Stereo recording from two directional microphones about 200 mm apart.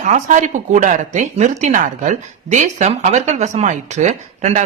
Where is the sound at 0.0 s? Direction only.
40° right (ahead or behind).